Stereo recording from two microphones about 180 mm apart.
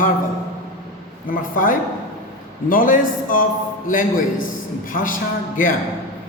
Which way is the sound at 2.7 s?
50° left (ahead or behind).